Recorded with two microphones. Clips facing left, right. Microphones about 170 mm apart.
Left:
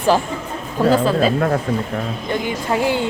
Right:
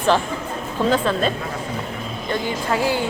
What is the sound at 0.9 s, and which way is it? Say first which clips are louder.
Speech: left 5 dB; 5° left (ahead or behind).